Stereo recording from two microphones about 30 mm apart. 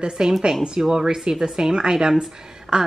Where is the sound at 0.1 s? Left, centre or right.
Right.